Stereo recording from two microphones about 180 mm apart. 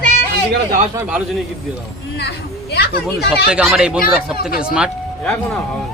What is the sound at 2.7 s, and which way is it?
Speech, 60° left (ahead or behind).